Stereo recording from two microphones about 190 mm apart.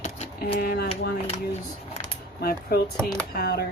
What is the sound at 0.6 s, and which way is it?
Speech, 50° left (ahead or behind).